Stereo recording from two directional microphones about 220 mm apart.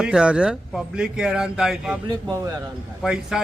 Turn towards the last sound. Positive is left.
turn(degrees=0)  # may be behind; listen again after turning